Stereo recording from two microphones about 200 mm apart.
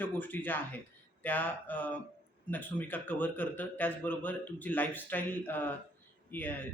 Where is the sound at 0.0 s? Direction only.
10° left (ahead or behind).